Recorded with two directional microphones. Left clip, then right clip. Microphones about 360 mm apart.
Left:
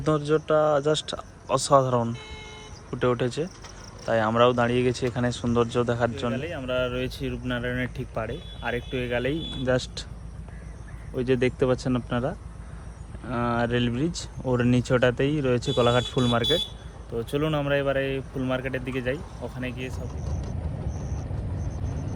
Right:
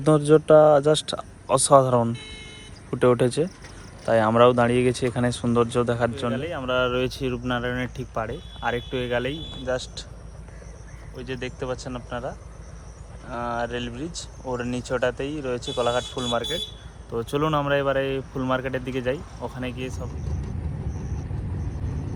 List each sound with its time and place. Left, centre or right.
0.0 s speech: centre
2.1 s speech: left
2.9 s speech: centre
6.3 s speech: centre
9.6 s speech: centre
11.2 s speech: centre
13.3 s speech: centre
17.2 s speech: centre